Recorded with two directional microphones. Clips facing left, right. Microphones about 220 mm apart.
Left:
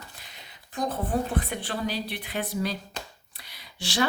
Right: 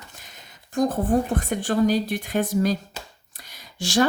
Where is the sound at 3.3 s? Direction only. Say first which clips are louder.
Right 8 dB; 45° right (ahead or behind).